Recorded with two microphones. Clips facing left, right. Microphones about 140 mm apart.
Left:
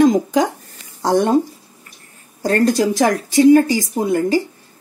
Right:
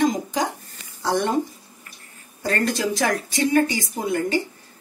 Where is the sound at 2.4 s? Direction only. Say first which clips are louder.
Left 8 dB; 40° left (ahead or behind).